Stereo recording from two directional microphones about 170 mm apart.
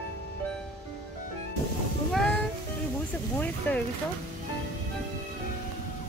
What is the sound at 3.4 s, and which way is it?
Speech, 10° left (ahead or behind).